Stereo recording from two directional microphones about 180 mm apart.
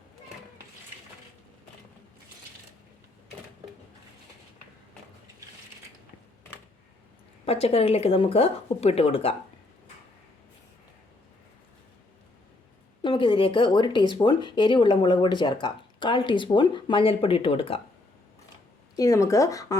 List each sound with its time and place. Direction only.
7.4 s speech: 35° left (ahead or behind)
13.0 s speech: 25° left (ahead or behind)
18.9 s speech: 20° left (ahead or behind)